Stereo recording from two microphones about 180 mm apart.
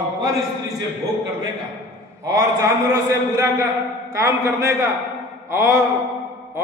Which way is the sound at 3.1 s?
15° right (ahead or behind).